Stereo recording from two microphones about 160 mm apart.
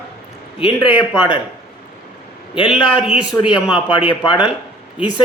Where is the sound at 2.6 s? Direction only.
5° right (ahead or behind).